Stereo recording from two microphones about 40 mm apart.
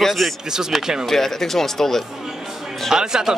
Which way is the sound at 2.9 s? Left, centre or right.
Centre.